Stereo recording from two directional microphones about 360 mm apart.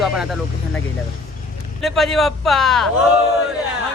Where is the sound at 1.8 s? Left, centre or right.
Centre.